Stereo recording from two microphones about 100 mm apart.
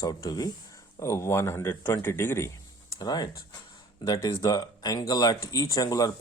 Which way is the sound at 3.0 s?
40° left (ahead or behind).